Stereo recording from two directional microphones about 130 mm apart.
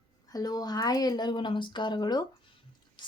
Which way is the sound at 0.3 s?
30° left (ahead or behind).